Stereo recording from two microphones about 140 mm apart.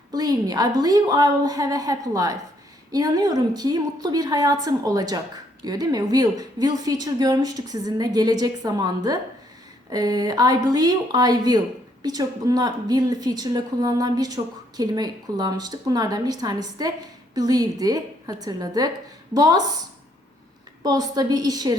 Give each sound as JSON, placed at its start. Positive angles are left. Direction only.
{"t": 0.1, "sound": "a woman's voice", "side_deg": -30}
{"t": 20.8, "sound": "a woman's voice", "side_deg": -30}